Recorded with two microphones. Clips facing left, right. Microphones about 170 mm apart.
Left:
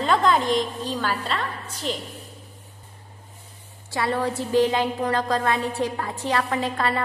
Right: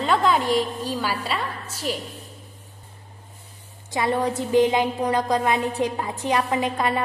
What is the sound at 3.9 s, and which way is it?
A woman's voice, 20° right (ahead or behind).